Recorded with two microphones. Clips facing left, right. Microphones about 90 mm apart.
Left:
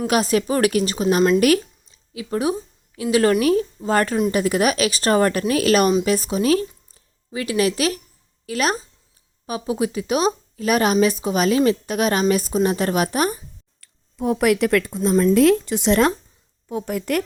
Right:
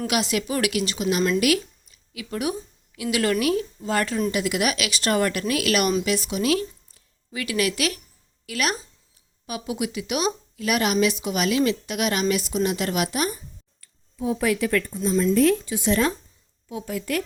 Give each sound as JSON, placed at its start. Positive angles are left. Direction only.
{"t": 0.1, "sound": "speech", "side_deg": 40}
{"t": 13.8, "sound": "speech", "side_deg": 60}
{"t": 15.1, "sound": "a woman's voice", "side_deg": 55}
{"t": 15.4, "sound": "speech", "side_deg": 70}
{"t": 16.6, "sound": "a woman's voice", "side_deg": 50}